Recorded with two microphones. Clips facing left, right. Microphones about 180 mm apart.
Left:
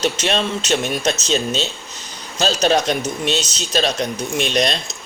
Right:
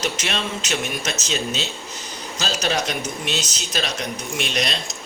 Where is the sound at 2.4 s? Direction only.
30° left (ahead or behind).